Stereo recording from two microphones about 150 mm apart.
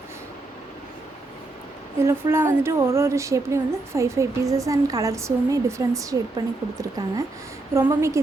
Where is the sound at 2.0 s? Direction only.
15° right (ahead or behind).